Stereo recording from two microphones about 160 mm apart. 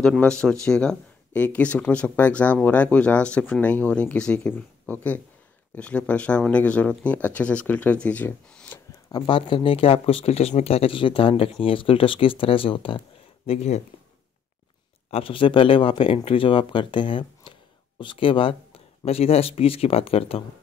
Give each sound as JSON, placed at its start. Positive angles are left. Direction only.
{"t": 0.0, "sound": "speech", "side_deg": 5}
{"t": 9.1, "sound": "speech", "side_deg": 30}
{"t": 13.5, "sound": "speech", "side_deg": 45}
{"t": 15.0, "sound": "speech", "side_deg": 35}